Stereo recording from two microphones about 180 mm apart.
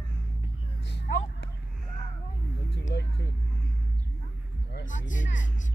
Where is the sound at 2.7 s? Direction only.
70° left (ahead or behind).